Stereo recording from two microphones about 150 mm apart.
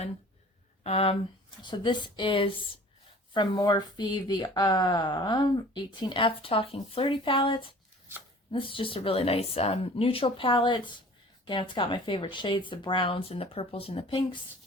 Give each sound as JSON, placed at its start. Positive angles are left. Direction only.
{"t": 0.9, "sound": "speech", "side_deg": 40}